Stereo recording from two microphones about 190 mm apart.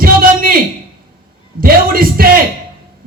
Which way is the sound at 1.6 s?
50° right (ahead or behind).